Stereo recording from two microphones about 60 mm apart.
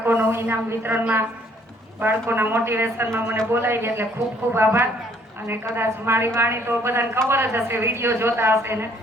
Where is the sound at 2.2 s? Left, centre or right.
Right.